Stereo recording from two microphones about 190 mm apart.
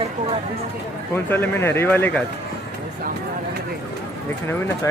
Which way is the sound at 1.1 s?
10° left (ahead or behind).